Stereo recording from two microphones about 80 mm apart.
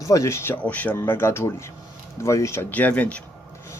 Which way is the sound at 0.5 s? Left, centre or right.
Centre.